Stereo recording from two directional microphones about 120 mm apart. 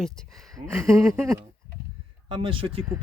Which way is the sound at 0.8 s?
25° right (ahead or behind).